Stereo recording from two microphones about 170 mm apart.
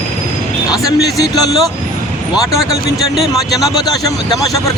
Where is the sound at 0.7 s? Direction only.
20° left (ahead or behind).